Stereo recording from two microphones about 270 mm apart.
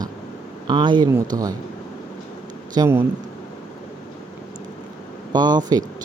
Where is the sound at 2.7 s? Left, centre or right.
Centre.